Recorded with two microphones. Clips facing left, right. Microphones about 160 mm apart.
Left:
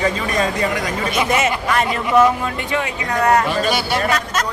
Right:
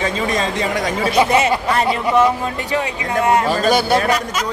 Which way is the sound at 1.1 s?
30° right (ahead or behind).